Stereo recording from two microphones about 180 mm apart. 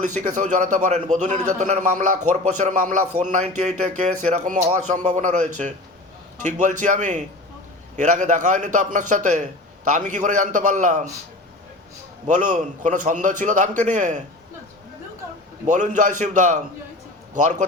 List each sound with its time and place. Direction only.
0.0 s a man's voice: 45° right (ahead or behind)
12.2 s a man's voice: 45° right (ahead or behind)
15.6 s a man's voice: 45° right (ahead or behind)